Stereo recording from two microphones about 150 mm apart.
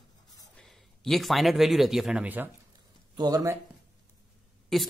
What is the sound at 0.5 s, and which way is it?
A man's voice, centre (ahead or behind).